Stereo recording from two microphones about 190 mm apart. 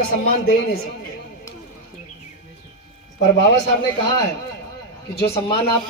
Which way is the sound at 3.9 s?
25° left (ahead or behind).